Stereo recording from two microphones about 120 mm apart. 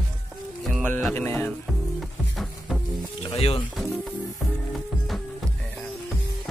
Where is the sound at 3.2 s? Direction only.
50° left (ahead or behind).